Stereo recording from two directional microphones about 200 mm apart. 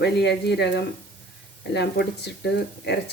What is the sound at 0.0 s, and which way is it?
Speech, 55° left (ahead or behind).